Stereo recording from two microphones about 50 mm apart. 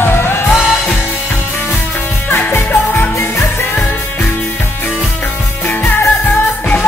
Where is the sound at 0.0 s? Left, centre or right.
Left.